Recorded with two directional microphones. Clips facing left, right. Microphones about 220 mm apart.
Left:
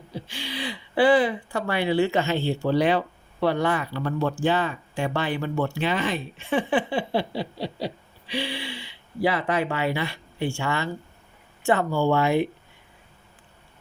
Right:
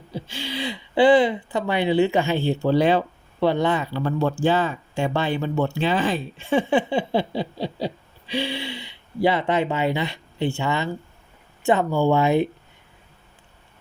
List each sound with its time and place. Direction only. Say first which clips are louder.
0.1 s speech: right 4 dB; 25° right (ahead or behind)
8.3 s speech: right 3 dB; 25° right (ahead or behind)